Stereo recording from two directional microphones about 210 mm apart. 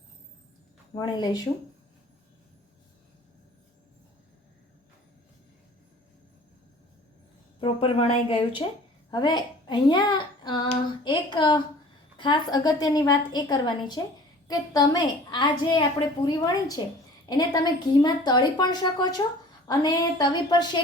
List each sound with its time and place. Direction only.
0.9 s a woman's voice: 20° left (ahead or behind)
7.6 s a woman's voice: 25° left (ahead or behind)